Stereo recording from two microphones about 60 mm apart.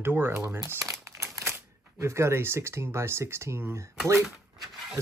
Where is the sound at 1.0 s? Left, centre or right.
Right.